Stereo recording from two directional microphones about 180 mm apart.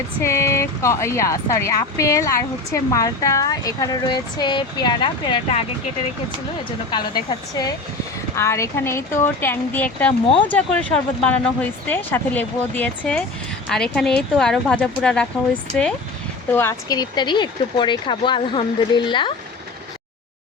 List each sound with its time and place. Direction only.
0.2 s speech: 15° left (ahead or behind)
8.4 s speech: 15° left (ahead or behind)